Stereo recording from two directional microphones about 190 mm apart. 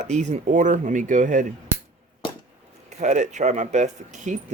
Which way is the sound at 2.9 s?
40° right (ahead or behind).